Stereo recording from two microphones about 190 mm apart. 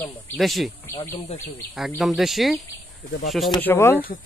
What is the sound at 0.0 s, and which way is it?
Speech, centre (ahead or behind).